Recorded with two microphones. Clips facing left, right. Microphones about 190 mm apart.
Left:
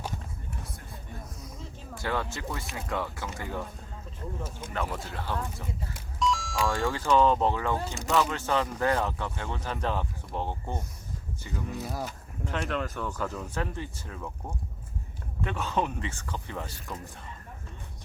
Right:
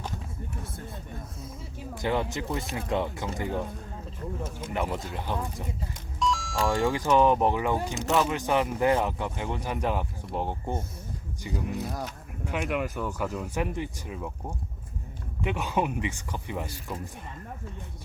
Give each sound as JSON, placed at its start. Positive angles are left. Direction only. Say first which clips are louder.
{"t": 1.8, "sound": "speech", "louder": "right 4 dB", "side_deg": -20}
{"t": 5.9, "sound": "a sound", "louder": "even", "side_deg": 0}
{"t": 6.7, "sound": "speech", "louder": "right 3 dB", "side_deg": -15}
{"t": 11.8, "sound": "speech", "louder": "right 1 dB", "side_deg": 0}
{"t": 12.5, "sound": "speech", "louder": "right 2 dB", "side_deg": -15}